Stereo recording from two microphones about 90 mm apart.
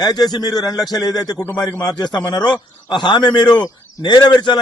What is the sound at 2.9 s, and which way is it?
A man's voice, 55° left (ahead or behind).